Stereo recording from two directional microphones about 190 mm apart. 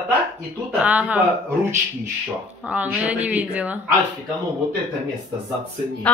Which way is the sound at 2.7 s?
5° right (ahead or behind).